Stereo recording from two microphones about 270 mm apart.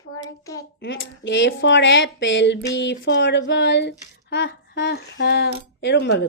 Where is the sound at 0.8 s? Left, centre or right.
Left.